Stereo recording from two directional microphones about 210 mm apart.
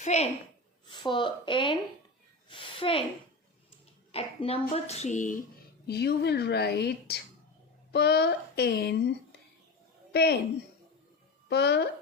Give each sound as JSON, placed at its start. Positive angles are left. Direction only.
{"t": 0.0, "sound": "a woman's voice", "side_deg": 30}
{"t": 0.9, "sound": "a woman's voice", "side_deg": 20}
{"t": 4.1, "sound": "speech", "side_deg": 25}
{"t": 5.9, "sound": "a woman's voice", "side_deg": 50}
{"t": 11.4, "sound": "speech", "side_deg": 55}